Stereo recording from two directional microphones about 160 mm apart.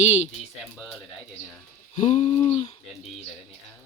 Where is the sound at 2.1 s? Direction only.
35° left (ahead or behind).